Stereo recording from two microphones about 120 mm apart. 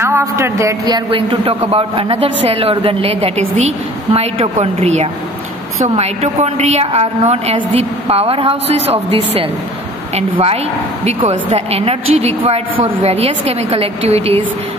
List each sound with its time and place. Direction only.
0.0 s a man's voice: 25° right (ahead or behind); by 14.4 s 60° right (ahead or behind)